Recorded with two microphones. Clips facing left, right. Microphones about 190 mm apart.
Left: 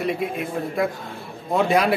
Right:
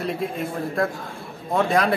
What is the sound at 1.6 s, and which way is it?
Speech, 5° left (ahead or behind).